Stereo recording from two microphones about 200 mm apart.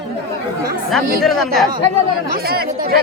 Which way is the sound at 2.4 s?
50° right (ahead or behind).